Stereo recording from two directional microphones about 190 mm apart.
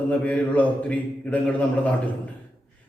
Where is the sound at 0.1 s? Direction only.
5° left (ahead or behind).